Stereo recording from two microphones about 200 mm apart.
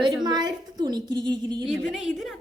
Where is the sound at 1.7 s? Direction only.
Centre (ahead or behind).